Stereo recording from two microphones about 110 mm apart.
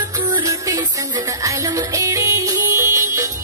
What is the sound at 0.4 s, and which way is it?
Music, 30° right (ahead or behind).